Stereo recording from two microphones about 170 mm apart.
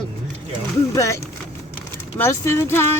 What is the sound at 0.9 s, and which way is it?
Speech, 15° left (ahead or behind).